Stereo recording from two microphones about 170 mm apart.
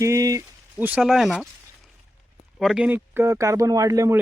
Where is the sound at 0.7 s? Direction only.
5° right (ahead or behind).